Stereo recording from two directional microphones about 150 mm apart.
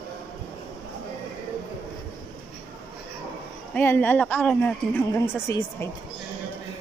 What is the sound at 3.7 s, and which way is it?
Speech, 10° left (ahead or behind).